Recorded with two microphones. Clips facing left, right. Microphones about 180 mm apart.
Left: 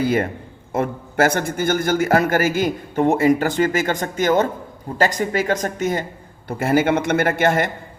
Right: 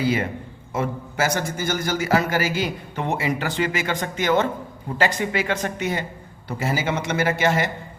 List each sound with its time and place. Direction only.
0.0 s a man's voice: 50° left (ahead or behind)
6.6 s a man's voice: 55° left (ahead or behind)